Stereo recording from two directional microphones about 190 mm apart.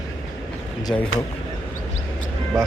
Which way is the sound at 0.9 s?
10° left (ahead or behind).